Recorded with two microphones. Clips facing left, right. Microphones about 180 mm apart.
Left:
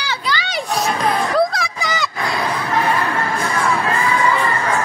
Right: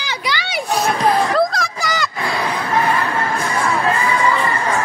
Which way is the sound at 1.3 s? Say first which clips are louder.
Even; centre (ahead or behind).